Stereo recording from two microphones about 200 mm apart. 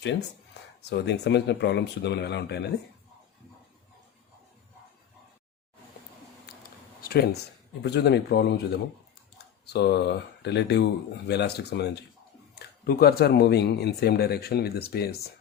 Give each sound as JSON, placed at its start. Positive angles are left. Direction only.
{"t": 0.0, "sound": "speech", "side_deg": 60}
{"t": 7.0, "sound": "a sound", "side_deg": 50}
{"t": 7.8, "sound": "speech", "side_deg": 55}